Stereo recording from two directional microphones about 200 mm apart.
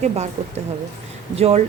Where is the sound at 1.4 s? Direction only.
30° right (ahead or behind).